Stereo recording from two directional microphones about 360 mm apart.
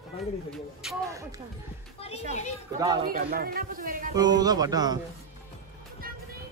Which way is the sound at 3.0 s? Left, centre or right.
Right.